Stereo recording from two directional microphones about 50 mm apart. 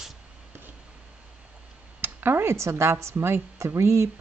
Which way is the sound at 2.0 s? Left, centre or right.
Right.